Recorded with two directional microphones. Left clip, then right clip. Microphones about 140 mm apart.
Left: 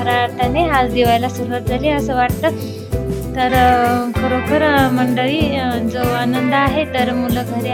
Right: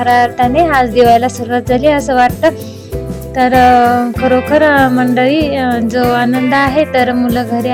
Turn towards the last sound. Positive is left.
turn(degrees=-40)  # may be behind; listen again after turning